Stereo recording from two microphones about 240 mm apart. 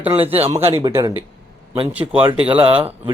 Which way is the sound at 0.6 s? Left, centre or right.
Right.